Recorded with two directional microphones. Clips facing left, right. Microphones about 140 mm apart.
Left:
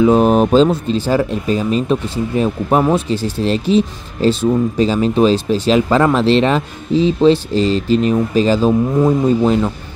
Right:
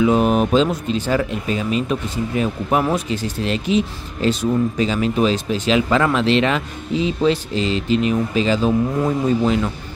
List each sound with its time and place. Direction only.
0.0 s speech: 35° left (ahead or behind)